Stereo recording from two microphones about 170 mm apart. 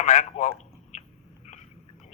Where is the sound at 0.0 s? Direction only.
40° left (ahead or behind).